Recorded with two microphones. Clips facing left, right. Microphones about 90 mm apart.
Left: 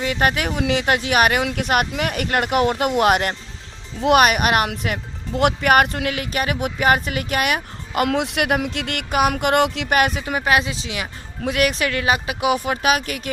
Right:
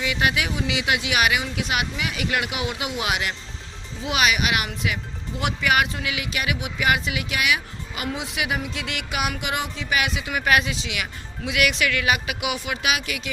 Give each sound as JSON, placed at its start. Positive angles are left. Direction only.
{"t": 0.0, "sound": "speech", "side_deg": 45}
{"t": 8.0, "sound": "speech", "side_deg": 65}
{"t": 9.9, "sound": "speech", "side_deg": 50}
{"t": 10.4, "sound": "speech", "side_deg": 30}